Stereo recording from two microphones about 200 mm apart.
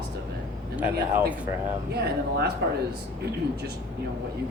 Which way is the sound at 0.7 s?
10° right (ahead or behind).